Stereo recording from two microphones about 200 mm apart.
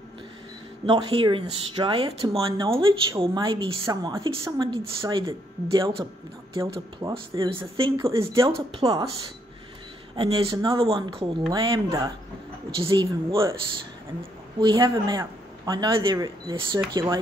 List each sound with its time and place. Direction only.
0.8 s speech: 25° right (ahead or behind)
10.1 s speech: 25° right (ahead or behind)
14.6 s speech: 20° right (ahead or behind)